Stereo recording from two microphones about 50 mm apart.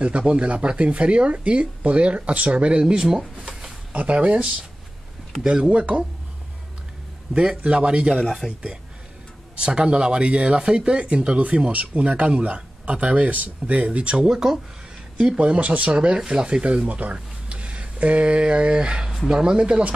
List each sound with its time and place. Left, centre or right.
0.2 s speech: centre
0.5 s speech: right; by 3.7 s centre
3.9 s speech: right
5.4 s speech: centre
7.6 s speech: right
8.3 s speech: centre
9.6 s speech: right
10.6 s a man's voice: centre
14.1 s speech: centre
15.3 s speech: right
19.0 s speech: centre
19.4 s speech: centre